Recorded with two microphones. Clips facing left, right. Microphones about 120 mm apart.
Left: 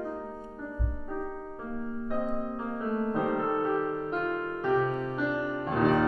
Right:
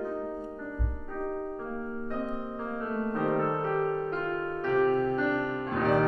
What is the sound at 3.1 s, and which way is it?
Music, 10° left (ahead or behind).